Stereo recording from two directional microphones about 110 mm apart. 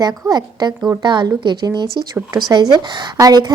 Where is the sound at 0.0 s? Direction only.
40° right (ahead or behind).